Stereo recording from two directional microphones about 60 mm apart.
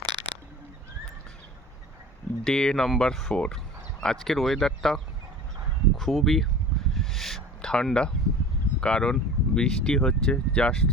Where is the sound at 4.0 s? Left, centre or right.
Centre.